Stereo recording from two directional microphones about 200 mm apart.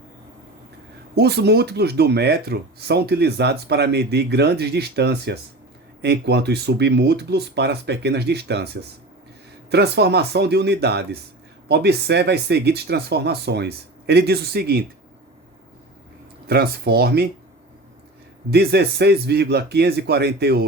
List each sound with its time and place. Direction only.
1.1 s speech: 55° right (ahead or behind)
16.5 s speech: 50° right (ahead or behind)
18.5 s speech: 55° right (ahead or behind)